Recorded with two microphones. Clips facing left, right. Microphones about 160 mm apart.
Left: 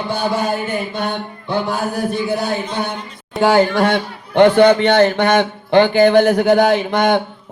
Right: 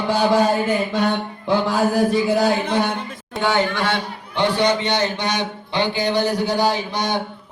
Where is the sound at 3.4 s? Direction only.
35° left (ahead or behind).